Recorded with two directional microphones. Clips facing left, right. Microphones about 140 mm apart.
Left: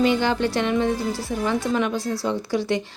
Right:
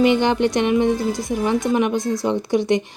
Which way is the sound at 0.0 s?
20° right (ahead or behind).